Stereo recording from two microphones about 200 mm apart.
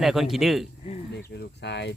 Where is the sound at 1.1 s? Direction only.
60° left (ahead or behind).